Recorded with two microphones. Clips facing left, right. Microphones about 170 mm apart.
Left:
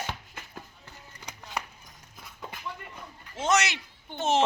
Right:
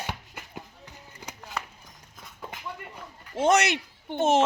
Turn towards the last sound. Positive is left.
turn(degrees=-50)  # may be behind; listen again after turning